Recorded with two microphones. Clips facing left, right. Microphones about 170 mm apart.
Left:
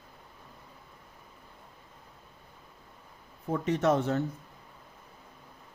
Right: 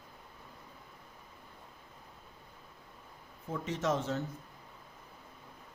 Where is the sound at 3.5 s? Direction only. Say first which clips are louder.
Left 7 dB; 60° left (ahead or behind).